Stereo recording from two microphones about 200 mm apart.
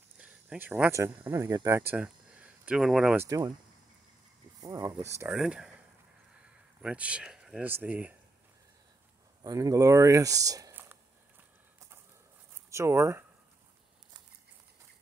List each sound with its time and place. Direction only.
0.2 s speech: 5° right (ahead or behind)
3.3 s speech: 15° right (ahead or behind)
4.6 s speech: 20° right (ahead or behind)
6.8 s speech: 5° right (ahead or behind)
9.4 s speech: 15° right (ahead or behind)
12.6 s speech: 15° right (ahead or behind)